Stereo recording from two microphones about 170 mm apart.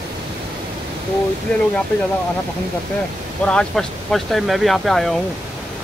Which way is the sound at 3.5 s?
5° left (ahead or behind).